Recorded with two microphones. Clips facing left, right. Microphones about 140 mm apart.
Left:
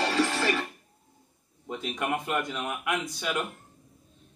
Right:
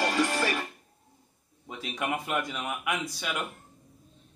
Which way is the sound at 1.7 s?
Centre (ahead or behind).